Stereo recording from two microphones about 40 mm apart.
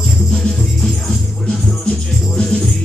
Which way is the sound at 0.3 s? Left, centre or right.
Centre.